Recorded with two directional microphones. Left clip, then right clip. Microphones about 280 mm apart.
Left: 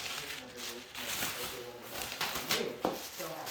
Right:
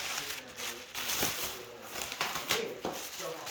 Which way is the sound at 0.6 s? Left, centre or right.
Centre.